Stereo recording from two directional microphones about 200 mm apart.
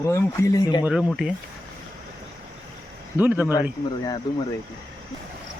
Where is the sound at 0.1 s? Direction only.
15° left (ahead or behind).